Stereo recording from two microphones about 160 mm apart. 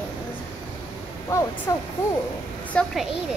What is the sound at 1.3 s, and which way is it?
Speech, 15° left (ahead or behind).